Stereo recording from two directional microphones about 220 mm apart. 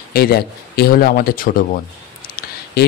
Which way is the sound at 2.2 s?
40° left (ahead or behind).